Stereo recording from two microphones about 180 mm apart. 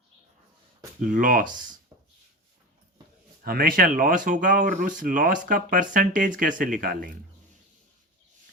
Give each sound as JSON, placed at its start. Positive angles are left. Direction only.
{"t": 1.0, "sound": "speech", "side_deg": -50}
{"t": 3.4, "sound": "speech", "side_deg": -55}